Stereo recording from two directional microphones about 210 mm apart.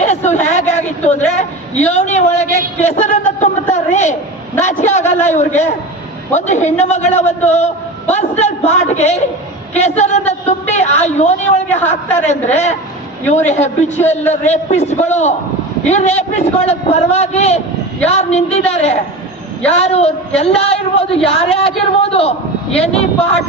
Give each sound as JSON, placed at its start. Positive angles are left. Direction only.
{"t": 0.0, "sound": "a sound", "side_deg": 35}
{"t": 4.8, "sound": "a man's voice", "side_deg": 35}
{"t": 6.3, "sound": "a man's voice", "side_deg": 35}
{"t": 11.8, "sound": "a man's voice", "side_deg": 10}
{"t": 12.1, "sound": "a man's voice", "side_deg": 35}
{"t": 13.9, "sound": "a man's voice", "side_deg": 10}
{"t": 14.4, "sound": "a man's voice", "side_deg": 30}